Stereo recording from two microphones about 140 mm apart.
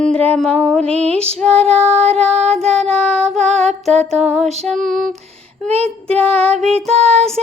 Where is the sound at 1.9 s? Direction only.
50° right (ahead or behind).